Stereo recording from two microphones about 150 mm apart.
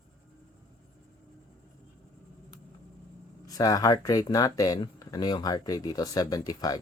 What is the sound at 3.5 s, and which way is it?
A man's voice, 25° left (ahead or behind).